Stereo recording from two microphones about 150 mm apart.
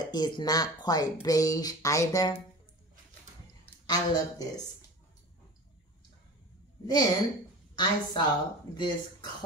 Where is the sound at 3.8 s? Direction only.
25° left (ahead or behind).